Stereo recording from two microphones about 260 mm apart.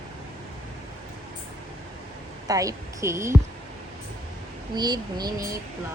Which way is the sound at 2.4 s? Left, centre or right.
Centre.